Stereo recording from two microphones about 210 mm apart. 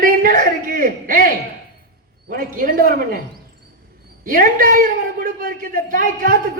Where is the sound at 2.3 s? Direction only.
40° right (ahead or behind).